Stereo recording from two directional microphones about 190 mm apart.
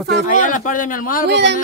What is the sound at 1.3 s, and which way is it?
Speech, 65° right (ahead or behind).